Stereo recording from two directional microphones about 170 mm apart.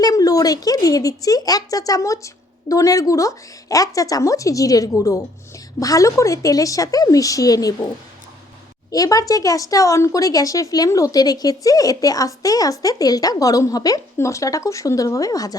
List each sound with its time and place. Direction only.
0.0 s speech: 20° left (ahead or behind)
8.9 s speech: 20° left (ahead or behind)